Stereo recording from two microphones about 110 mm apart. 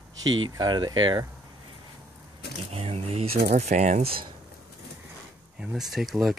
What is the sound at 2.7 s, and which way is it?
Speech, 65° right (ahead or behind).